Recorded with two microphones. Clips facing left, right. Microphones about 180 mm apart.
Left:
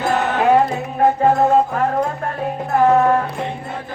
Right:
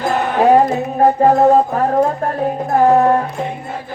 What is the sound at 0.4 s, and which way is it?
Music, 40° right (ahead or behind).